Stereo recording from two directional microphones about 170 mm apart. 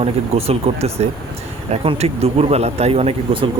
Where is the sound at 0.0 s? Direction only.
35° right (ahead or behind).